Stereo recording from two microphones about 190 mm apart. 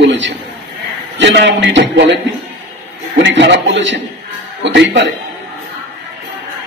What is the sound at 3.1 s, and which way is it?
A man's voice, 70° right (ahead or behind).